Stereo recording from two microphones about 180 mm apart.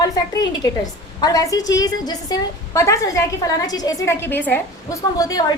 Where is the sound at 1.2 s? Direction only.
20° left (ahead or behind).